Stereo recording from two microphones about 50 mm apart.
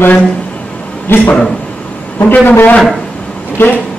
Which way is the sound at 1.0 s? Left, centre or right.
Left.